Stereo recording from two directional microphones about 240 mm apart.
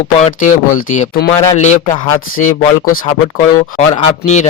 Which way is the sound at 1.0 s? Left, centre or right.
Left.